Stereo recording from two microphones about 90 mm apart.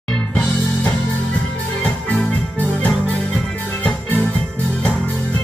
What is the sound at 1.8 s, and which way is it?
Music, 15° left (ahead or behind).